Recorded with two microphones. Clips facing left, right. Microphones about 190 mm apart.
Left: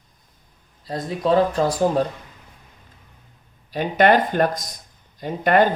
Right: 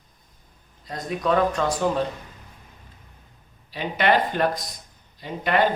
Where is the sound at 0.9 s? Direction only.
30° left (ahead or behind).